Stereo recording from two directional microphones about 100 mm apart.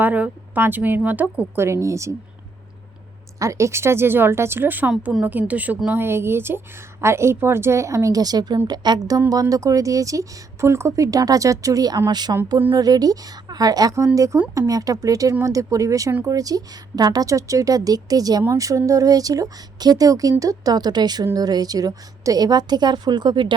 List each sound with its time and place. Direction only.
0.0 s a woman's voice: 15° right (ahead or behind)
3.3 s a woman's voice: 30° right (ahead or behind); by 23.6 s 50° right (ahead or behind)